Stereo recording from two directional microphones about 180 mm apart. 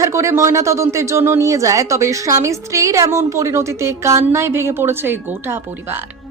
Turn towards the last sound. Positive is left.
turn(degrees=-10)  # may be behind; listen again after turning